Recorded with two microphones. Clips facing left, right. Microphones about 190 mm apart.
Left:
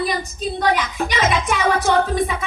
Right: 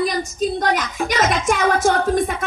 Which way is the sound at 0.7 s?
50° right (ahead or behind).